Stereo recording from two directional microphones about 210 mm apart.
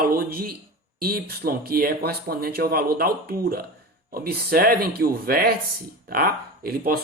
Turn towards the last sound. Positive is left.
turn(degrees=-45)  # may be behind; listen again after turning